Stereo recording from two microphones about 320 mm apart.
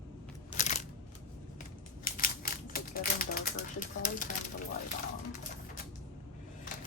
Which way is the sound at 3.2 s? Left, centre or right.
Left.